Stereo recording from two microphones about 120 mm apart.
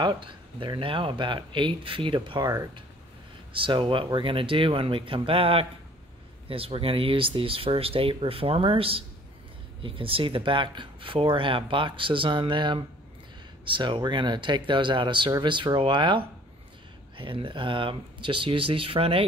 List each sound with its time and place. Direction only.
0.0 s speech: 45° right (ahead or behind)
3.5 s speech: 45° right (ahead or behind)